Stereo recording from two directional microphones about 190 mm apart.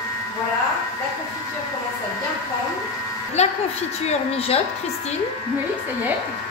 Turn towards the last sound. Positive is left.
turn(degrees=30)  # may be behind; listen again after turning